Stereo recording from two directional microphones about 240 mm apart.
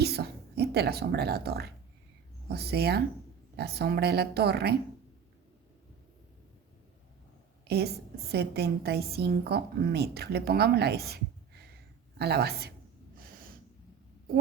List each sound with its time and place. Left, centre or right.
0.0 s a woman's voice: right
7.7 s a woman's voice: right
12.2 s a woman's voice: right